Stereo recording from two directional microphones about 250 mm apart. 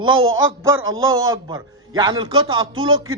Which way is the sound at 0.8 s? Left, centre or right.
Right.